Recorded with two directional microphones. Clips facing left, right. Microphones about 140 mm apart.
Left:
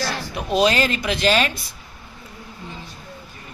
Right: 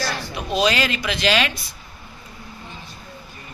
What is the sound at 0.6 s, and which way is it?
Speech, 40° left (ahead or behind).